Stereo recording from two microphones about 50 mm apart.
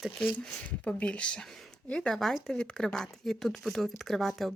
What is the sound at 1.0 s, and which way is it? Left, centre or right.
Speech, centre.